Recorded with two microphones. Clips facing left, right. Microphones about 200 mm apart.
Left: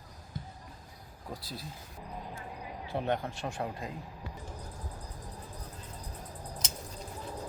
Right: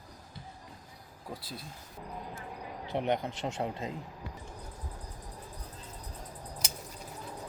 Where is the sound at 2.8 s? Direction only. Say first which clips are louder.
Right 2 dB; 20° right (ahead or behind).